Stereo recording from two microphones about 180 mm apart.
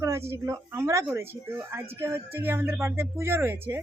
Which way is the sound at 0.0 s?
15° right (ahead or behind).